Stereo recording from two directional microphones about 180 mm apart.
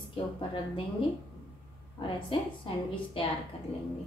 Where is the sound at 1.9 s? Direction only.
25° left (ahead or behind).